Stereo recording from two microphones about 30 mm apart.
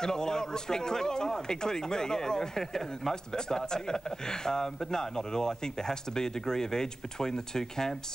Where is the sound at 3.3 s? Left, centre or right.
Left.